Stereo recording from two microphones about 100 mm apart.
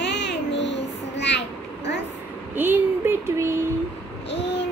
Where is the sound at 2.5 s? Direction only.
20° right (ahead or behind).